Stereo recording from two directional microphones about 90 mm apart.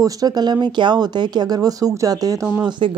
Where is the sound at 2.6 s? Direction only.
60° right (ahead or behind).